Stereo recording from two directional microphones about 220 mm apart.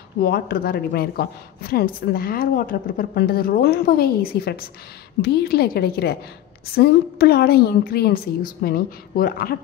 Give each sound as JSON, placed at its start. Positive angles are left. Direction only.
{"t": 0.2, "sound": "speech", "side_deg": 45}